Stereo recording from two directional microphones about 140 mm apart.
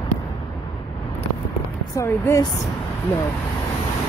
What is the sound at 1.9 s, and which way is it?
Speech, 20° left (ahead or behind).